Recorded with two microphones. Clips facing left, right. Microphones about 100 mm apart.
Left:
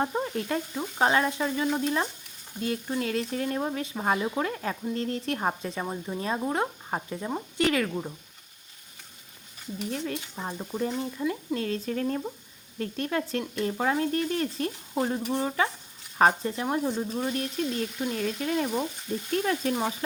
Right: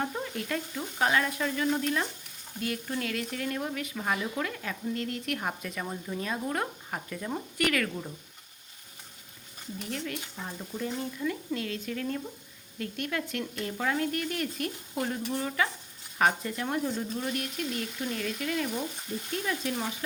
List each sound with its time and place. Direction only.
0.0 s speech: 30° left (ahead or behind)
9.9 s stir: 30° left (ahead or behind)
10.9 s speech: 25° left (ahead or behind)
11.5 s stir: 35° left (ahead or behind)
16.6 s speech: 20° left (ahead or behind)
18.1 s stir: 35° left (ahead or behind)
19.1 s stir: 55° left (ahead or behind)
19.7 s stir: 30° left (ahead or behind)